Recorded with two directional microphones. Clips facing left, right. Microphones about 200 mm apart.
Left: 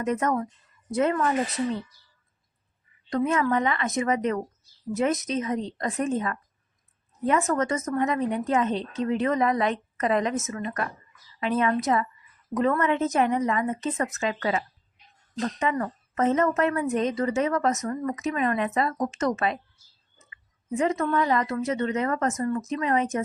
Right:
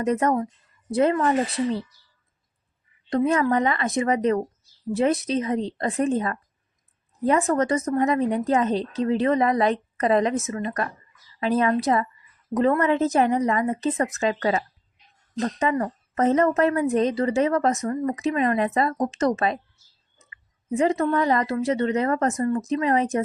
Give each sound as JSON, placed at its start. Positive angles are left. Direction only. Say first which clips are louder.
{"t": 0.0, "sound": "a woman's voice", "louder": "right 4 dB", "side_deg": -35}
{"t": 3.1, "sound": "a woman's voice", "louder": "right 3 dB", "side_deg": -35}
{"t": 20.7, "sound": "a woman's voice", "louder": "right 3 dB", "side_deg": -30}